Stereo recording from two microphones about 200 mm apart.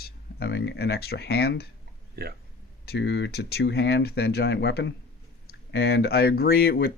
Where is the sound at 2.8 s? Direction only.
60° left (ahead or behind).